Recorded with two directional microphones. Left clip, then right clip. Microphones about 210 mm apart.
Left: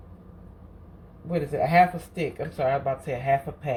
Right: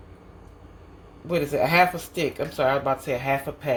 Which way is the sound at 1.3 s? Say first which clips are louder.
Right 1 dB; 25° right (ahead or behind).